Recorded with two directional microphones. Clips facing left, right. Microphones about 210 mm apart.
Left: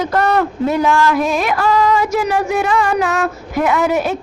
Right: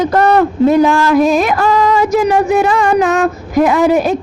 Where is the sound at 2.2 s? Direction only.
35° right (ahead or behind).